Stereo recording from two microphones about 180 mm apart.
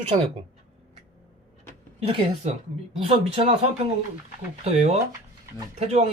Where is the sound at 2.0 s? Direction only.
30° right (ahead or behind).